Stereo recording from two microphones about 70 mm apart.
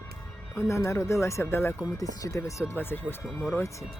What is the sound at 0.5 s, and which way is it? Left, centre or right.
Speech, left.